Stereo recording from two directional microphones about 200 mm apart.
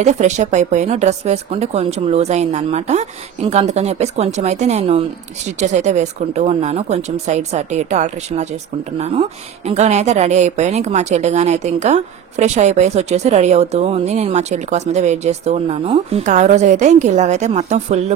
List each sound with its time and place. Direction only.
0.0 s a woman's voice: 35° right (ahead or behind)